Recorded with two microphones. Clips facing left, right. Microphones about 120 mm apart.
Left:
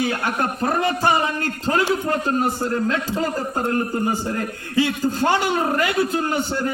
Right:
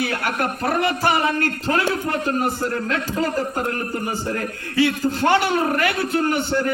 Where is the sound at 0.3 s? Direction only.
20° left (ahead or behind).